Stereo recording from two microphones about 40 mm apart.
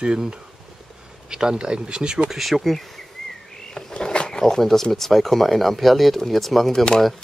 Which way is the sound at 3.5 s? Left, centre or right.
Centre.